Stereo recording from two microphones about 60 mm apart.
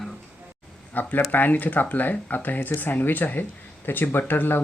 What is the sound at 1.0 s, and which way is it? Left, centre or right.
Speech, left.